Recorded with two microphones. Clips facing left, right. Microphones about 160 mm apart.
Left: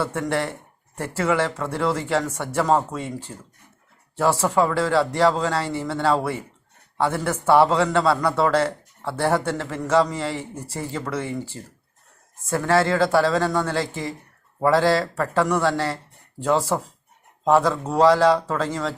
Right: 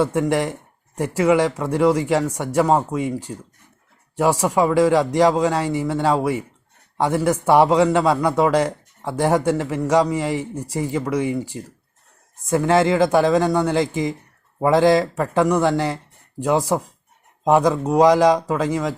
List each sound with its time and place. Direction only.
0.0 s a man's voice: 15° right (ahead or behind)